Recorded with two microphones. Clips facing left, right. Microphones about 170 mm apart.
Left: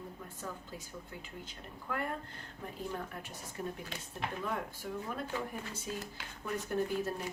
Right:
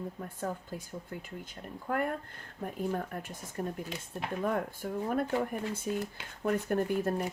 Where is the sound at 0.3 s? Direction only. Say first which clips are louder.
Right 8 dB; 50° right (ahead or behind).